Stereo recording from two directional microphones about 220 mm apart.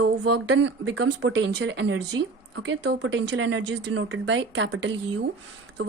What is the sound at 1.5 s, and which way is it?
Speech, 50° right (ahead or behind).